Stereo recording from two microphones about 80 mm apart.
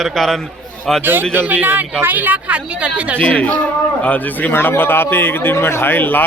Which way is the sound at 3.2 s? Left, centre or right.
Centre.